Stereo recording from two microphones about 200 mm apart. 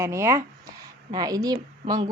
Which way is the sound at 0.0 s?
15° right (ahead or behind).